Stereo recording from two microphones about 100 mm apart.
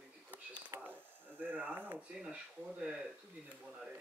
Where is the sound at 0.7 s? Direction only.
20° right (ahead or behind).